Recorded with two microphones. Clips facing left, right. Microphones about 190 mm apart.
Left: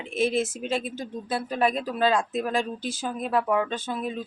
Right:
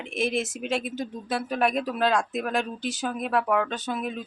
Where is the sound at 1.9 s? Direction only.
Centre (ahead or behind).